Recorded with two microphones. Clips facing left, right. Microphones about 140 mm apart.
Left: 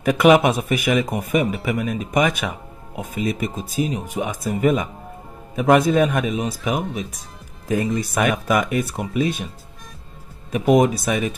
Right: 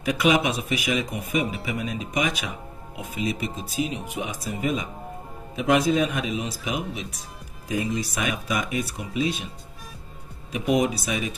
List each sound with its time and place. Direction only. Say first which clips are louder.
0.0 s speech: left 7 dB; 55° left (ahead or behind)
10.8 s speech: left 6 dB; 50° left (ahead or behind)